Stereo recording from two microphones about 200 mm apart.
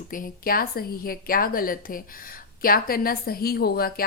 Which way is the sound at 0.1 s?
45° left (ahead or behind).